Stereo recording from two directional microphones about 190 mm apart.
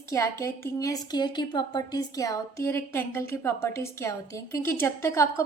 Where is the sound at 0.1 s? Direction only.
15° left (ahead or behind).